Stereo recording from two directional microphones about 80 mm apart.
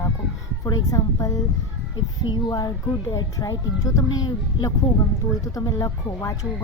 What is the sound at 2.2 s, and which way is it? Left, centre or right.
Speech, left.